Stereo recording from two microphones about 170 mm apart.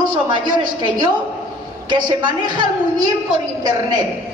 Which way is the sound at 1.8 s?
25° right (ahead or behind).